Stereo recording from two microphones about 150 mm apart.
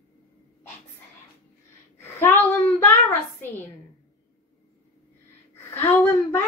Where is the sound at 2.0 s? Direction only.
15° left (ahead or behind).